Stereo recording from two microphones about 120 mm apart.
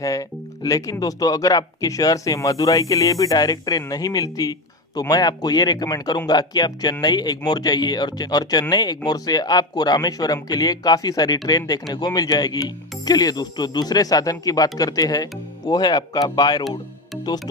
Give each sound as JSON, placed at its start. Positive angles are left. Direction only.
{"t": 0.0, "sound": "speech", "side_deg": 30}